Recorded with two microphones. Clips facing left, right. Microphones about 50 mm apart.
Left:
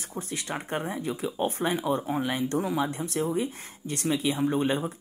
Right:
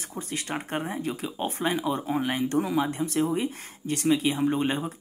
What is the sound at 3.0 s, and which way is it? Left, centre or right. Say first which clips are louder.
Speech: right 2 dB; right.